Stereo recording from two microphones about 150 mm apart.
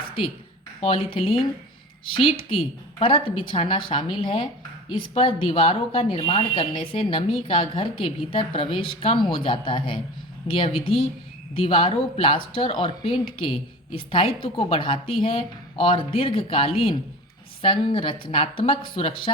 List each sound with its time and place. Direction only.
0.8 s speech: 40° left (ahead or behind)